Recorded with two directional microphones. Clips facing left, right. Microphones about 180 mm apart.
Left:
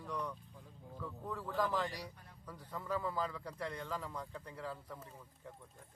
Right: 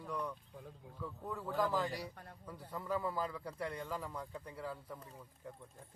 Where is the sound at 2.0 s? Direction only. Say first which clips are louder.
Right 3 dB; 55° right (ahead or behind).